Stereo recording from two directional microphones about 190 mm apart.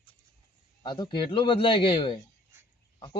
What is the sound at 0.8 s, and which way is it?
A man's voice, 25° left (ahead or behind).